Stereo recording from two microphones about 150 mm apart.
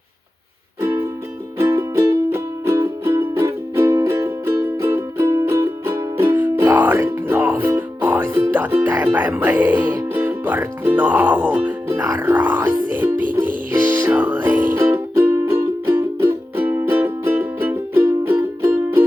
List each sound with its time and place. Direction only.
1.5 s music: 20° right (ahead or behind)